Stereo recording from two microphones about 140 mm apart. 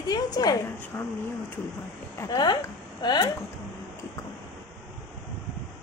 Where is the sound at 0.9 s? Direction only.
15° left (ahead or behind).